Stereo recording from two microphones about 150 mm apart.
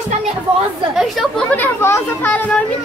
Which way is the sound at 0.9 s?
Centre (ahead or behind).